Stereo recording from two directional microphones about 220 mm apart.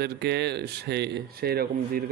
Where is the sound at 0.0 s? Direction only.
45° right (ahead or behind).